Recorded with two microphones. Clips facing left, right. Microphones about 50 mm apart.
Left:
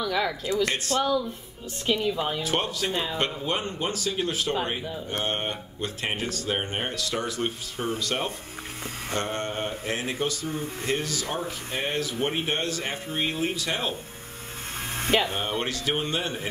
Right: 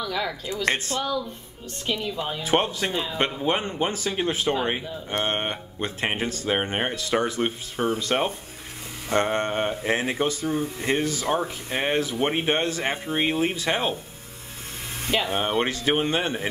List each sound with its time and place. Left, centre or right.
0.0 s speech: centre
0.9 s speech: centre
1.9 s speech: centre
2.4 s speech: right
15.2 s speech: right